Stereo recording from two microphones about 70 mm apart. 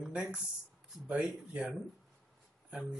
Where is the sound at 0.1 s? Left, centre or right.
Centre.